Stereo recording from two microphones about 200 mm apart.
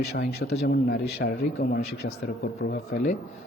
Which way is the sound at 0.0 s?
50° left (ahead or behind).